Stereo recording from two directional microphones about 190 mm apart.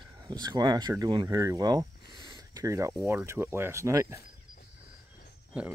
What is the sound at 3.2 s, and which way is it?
Speech, 15° right (ahead or behind).